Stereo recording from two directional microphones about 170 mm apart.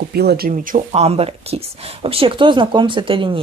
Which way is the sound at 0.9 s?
35° right (ahead or behind).